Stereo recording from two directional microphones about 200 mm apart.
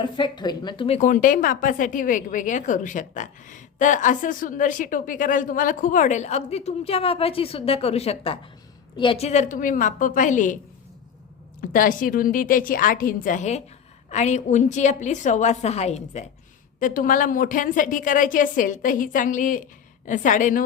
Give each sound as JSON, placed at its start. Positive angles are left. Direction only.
{"t": 0.0, "sound": "a woman's voice", "side_deg": 20}
{"t": 11.6, "sound": "a woman's voice", "side_deg": 45}